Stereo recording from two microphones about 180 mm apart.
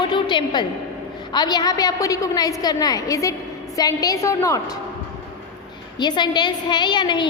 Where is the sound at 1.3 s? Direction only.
25° left (ahead or behind).